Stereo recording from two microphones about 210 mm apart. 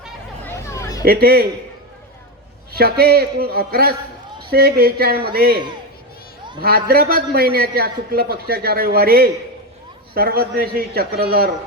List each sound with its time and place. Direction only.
0.4 s hubbub: 15° left (ahead or behind)
1.0 s a man's voice: 45° right (ahead or behind)
2.7 s a man's voice: 45° right (ahead or behind)
6.6 s a man's voice: 45° right (ahead or behind)